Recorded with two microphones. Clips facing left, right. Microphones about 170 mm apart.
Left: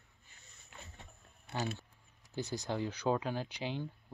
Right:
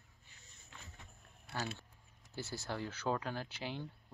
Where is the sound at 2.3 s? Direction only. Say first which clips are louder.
Left 5 dB; 15° left (ahead or behind).